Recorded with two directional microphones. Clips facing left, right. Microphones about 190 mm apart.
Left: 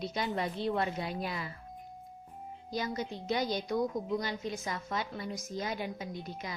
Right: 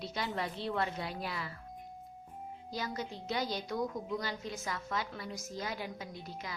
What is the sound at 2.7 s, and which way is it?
A woman's voice, 20° left (ahead or behind).